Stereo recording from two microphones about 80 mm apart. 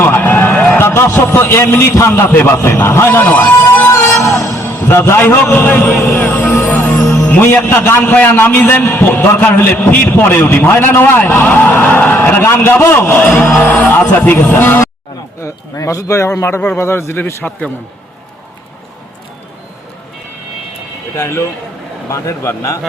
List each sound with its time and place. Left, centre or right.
0.0 s a sound: left
0.5 s a sound: centre
0.8 s a man's voice: left
2.8 s music: left
6.0 s vehicle: left
6.5 s music: left
7.3 s a man's voice: left
15.4 s a man's voice: left
21.2 s a man's voice: left